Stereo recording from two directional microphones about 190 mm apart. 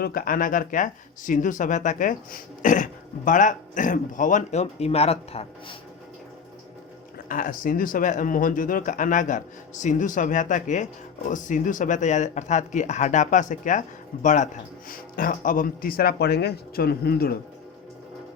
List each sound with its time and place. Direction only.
0.0 s speech: 50° left (ahead or behind); by 5.7 s 30° left (ahead or behind)
7.3 s speech: 45° left (ahead or behind)